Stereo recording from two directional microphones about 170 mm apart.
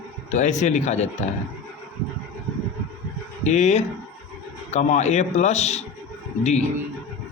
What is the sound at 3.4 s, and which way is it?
A man's voice, 40° left (ahead or behind).